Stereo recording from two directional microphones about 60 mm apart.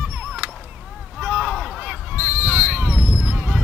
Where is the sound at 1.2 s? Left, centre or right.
Right.